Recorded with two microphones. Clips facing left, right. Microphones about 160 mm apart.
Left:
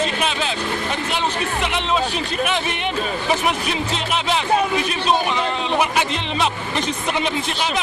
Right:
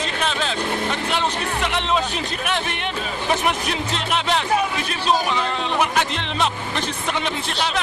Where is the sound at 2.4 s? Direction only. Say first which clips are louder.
Left 4 dB; 5° left (ahead or behind).